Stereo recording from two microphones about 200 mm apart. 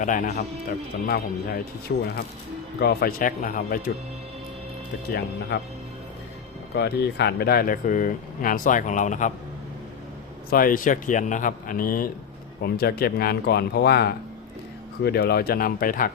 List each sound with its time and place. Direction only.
0.0 s speech: 40° left (ahead or behind); by 2.0 s 60° left (ahead or behind)
2.8 s speech: 50° left (ahead or behind)
5.5 s speech: 60° left (ahead or behind)
6.7 s speech: 55° left (ahead or behind); by 9.3 s 40° left (ahead or behind)
10.5 s speech: 45° left (ahead or behind)